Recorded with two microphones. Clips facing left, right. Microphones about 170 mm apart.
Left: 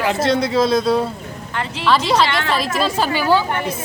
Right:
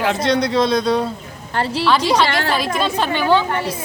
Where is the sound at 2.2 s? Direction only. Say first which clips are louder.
Right 1 dB; 50° right (ahead or behind).